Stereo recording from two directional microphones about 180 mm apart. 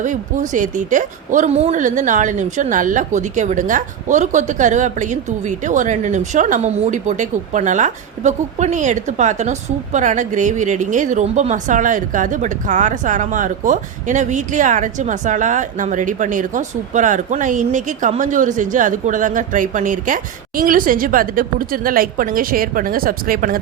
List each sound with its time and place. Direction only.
0.0 s speech: 45° right (ahead or behind)